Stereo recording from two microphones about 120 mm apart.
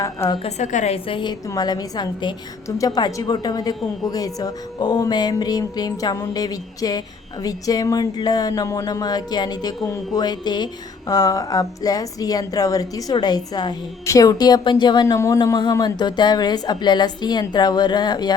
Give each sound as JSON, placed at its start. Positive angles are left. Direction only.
{"t": 0.0, "sound": "speech", "side_deg": 25}
{"t": 0.4, "sound": "a woman's voice", "side_deg": 80}
{"t": 0.9, "sound": "a woman's voice", "side_deg": 45}
{"t": 15.0, "sound": "speech", "side_deg": 25}
{"t": 15.5, "sound": "a woman's voice", "side_deg": 35}